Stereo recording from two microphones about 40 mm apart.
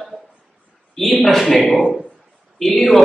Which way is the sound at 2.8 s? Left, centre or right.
Centre.